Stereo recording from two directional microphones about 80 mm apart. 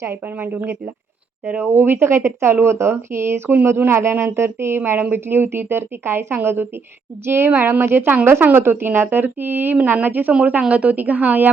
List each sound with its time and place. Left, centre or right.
0.0 s a woman's voice: right